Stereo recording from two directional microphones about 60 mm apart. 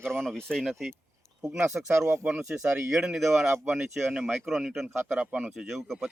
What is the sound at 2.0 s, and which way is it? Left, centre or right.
Speech, right.